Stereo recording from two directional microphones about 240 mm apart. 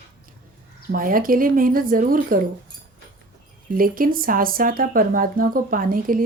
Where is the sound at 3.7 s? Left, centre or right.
Right.